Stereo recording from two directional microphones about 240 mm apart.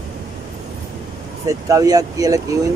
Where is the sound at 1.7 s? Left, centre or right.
Centre.